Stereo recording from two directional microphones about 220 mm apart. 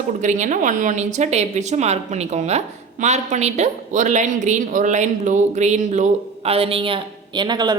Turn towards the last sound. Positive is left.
turn(degrees=-20)  # may be behind; listen again after turning